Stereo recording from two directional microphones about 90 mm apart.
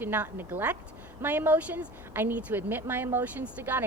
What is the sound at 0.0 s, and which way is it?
A woman's voice, 20° right (ahead or behind).